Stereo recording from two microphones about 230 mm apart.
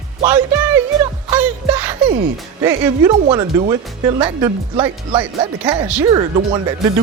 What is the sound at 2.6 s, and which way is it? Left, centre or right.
Speech, centre.